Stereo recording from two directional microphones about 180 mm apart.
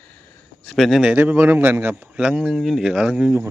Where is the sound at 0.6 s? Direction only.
Centre (ahead or behind).